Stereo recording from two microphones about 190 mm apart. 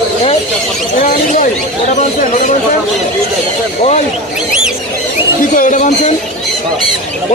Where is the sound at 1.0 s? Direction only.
45° left (ahead or behind).